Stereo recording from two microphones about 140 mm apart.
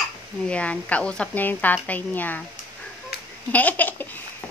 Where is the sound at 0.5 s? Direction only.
10° left (ahead or behind).